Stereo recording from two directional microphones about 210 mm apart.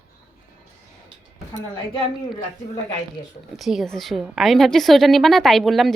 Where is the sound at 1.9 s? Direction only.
25° left (ahead or behind).